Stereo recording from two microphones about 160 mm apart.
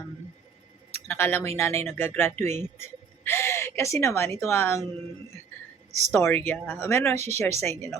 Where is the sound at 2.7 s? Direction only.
15° left (ahead or behind).